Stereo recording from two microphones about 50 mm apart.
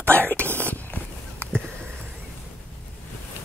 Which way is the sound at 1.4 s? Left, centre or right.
Right.